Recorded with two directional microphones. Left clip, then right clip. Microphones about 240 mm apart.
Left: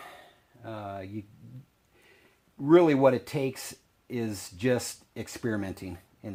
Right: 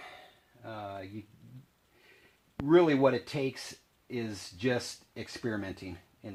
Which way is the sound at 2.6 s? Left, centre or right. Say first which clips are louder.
Left 4 dB; left.